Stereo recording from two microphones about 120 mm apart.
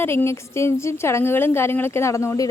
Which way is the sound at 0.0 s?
20° left (ahead or behind).